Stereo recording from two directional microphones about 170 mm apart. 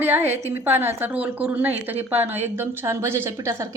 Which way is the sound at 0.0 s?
15° right (ahead or behind).